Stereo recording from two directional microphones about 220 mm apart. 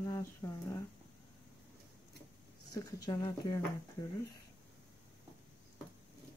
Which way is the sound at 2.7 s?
15° left (ahead or behind).